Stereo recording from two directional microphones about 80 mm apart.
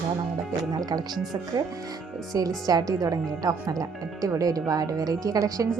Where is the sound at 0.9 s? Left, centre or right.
Right.